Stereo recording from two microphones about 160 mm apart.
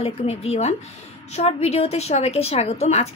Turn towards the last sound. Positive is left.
turn(degrees=45)  # may be behind; listen again after turning